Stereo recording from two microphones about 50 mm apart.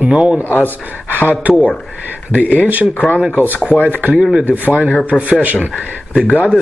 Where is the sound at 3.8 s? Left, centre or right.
Left.